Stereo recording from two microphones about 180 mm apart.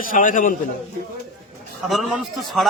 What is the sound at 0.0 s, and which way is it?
Speech, 50° left (ahead or behind).